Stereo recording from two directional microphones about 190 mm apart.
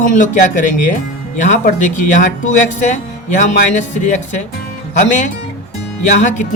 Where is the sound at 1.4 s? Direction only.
40° left (ahead or behind).